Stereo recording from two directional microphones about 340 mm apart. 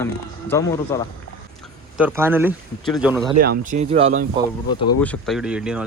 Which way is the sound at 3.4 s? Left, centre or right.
Right.